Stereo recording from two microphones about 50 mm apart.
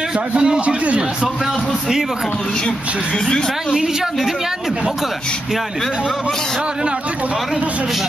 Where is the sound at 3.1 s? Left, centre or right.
Centre.